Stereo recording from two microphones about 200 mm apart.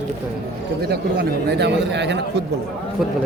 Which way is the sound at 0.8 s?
50° right (ahead or behind).